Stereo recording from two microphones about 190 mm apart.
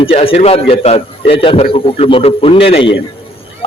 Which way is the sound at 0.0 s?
30° left (ahead or behind).